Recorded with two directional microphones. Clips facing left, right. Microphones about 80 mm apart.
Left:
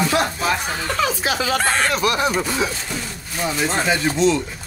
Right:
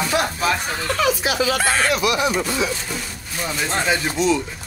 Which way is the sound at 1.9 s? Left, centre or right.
Left.